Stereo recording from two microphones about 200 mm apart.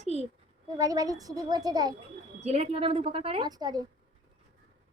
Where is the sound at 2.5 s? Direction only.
30° right (ahead or behind).